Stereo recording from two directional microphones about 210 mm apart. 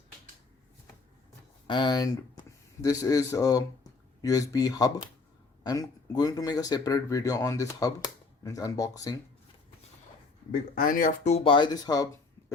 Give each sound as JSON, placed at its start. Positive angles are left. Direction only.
{"t": 1.6, "sound": "speech", "side_deg": 20}
{"t": 10.5, "sound": "speech", "side_deg": 40}